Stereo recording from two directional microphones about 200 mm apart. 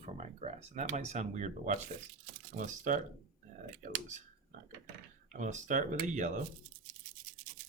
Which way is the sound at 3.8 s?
40° right (ahead or behind).